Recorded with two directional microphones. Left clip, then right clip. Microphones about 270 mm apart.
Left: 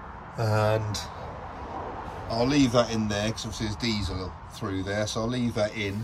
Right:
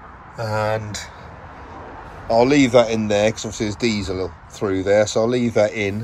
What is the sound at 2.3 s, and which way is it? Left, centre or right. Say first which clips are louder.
Speech: right 9 dB; centre.